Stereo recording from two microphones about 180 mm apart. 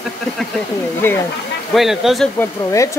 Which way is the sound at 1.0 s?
10° left (ahead or behind).